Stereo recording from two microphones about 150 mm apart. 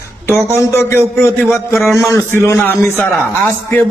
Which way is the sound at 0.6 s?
20° left (ahead or behind).